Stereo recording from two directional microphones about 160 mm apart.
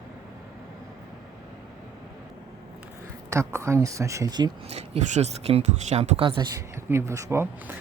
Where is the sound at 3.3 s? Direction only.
20° right (ahead or behind).